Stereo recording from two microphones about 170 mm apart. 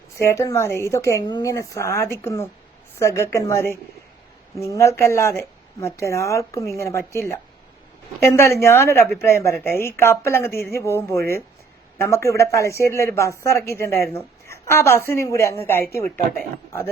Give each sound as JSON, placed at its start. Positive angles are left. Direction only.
{"t": 0.2, "sound": "speech", "side_deg": 15}